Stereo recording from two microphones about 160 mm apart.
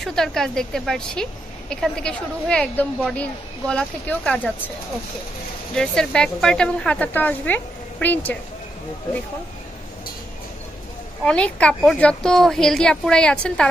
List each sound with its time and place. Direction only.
0.0 s a woman's voice: 5° left (ahead or behind)
5.8 s a woman's voice: 5° left (ahead or behind)
11.2 s a woman's voice: 5° left (ahead or behind)